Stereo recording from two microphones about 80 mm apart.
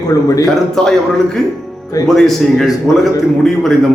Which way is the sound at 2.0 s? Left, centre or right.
Centre.